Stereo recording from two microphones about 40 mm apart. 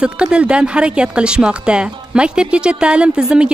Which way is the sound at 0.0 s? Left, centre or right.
Right.